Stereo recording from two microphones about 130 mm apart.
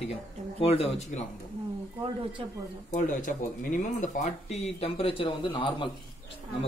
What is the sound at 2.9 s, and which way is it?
Speech, 85° left.